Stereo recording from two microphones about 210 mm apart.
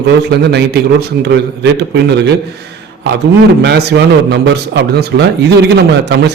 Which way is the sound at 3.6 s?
50° right (ahead or behind).